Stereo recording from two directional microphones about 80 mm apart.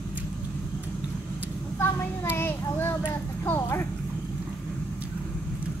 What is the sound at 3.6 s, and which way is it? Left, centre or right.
Speech, left.